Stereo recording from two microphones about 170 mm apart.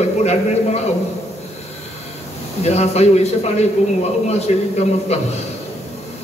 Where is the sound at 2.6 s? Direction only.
40° left (ahead or behind).